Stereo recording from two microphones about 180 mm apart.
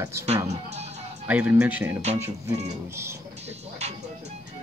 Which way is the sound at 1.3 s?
5° right (ahead or behind).